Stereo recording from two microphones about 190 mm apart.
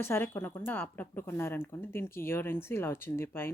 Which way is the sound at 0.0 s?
15° left (ahead or behind).